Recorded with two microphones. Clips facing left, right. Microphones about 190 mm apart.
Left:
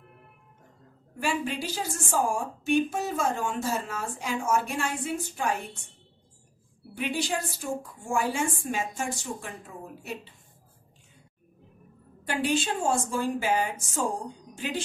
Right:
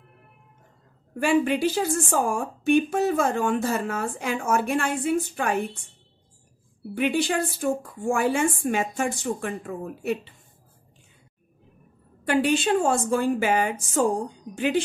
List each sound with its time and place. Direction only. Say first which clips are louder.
1.2 s a woman's voice: right 9 dB; 60° right (ahead or behind)
7.0 s a woman's voice: right 6 dB; 60° right (ahead or behind)
12.3 s a woman's voice: right 6 dB; 65° right (ahead or behind)